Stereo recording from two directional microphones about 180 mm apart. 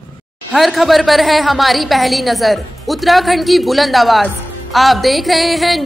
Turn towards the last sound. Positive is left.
turn(degrees=0)  # may be behind; listen again after turning